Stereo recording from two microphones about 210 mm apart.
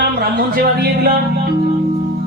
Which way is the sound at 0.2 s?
45° right (ahead or behind).